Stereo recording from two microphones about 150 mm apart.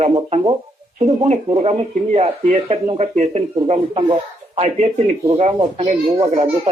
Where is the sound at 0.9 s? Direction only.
50° right (ahead or behind).